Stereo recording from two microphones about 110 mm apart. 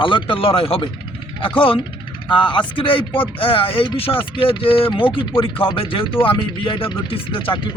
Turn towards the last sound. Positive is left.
turn(degrees=50)  # may be behind; listen again after turning